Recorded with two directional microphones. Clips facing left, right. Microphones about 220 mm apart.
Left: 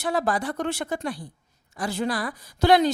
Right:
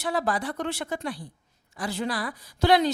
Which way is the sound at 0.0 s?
45° left (ahead or behind).